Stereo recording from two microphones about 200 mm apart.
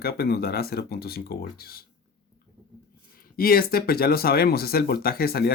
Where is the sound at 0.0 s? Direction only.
50° left (ahead or behind).